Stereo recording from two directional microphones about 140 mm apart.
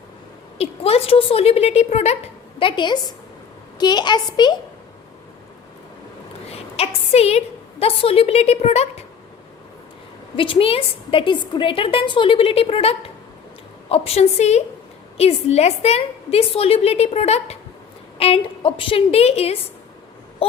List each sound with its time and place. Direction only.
0.6 s a woman's voice: 45° left (ahead or behind)
6.5 s a woman's voice: 45° left (ahead or behind)
10.3 s a woman's voice: 40° left (ahead or behind)
20.4 s a sound: 40° left (ahead or behind)